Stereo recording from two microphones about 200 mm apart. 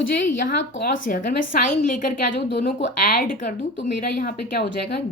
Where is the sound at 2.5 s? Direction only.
55° left (ahead or behind).